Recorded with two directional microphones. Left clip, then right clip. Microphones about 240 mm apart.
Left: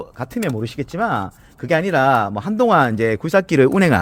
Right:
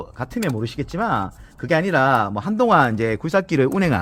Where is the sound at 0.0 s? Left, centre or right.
Left.